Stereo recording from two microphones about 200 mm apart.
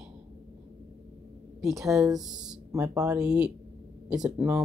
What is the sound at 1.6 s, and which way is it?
Speech, centre (ahead or behind).